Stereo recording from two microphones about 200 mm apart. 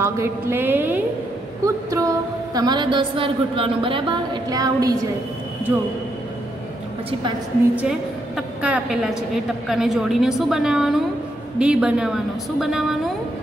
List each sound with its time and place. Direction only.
0.0 s a woman's voice: 15° right (ahead or behind)
7.7 s a woman's voice: 5° right (ahead or behind)